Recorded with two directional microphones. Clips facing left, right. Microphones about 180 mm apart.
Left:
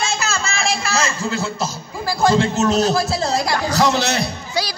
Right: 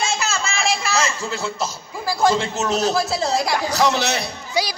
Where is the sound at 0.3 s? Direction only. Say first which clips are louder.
Left 1 dB; 20° right (ahead or behind).